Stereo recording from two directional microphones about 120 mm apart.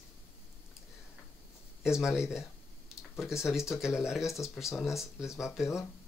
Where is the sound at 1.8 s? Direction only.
5° right (ahead or behind).